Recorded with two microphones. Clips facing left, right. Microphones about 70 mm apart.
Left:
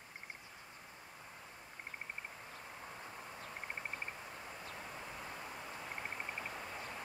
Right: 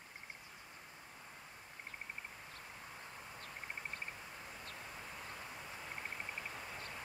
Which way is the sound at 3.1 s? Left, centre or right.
Centre.